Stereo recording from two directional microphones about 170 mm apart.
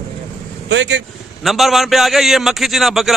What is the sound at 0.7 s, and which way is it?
Speech, 90° right.